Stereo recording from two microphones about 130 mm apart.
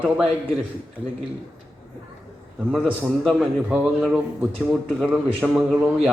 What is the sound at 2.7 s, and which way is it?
A man's voice, 10° right (ahead or behind).